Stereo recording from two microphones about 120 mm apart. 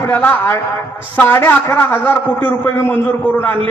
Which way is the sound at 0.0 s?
15° left (ahead or behind).